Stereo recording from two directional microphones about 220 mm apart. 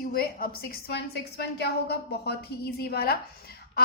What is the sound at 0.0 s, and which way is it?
A woman's voice, 40° left (ahead or behind).